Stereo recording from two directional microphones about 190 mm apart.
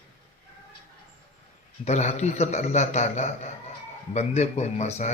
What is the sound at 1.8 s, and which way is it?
A man's voice, 35° left (ahead or behind).